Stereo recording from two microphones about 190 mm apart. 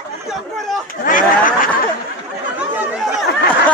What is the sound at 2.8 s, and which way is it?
Chatter, 5° right (ahead or behind).